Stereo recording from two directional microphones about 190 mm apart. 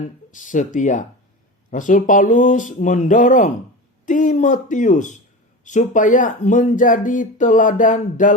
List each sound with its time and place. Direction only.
0.3 s speech: 45° left (ahead or behind)